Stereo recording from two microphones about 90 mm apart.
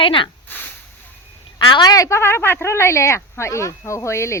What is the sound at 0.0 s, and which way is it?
Speech, 70° left (ahead or behind).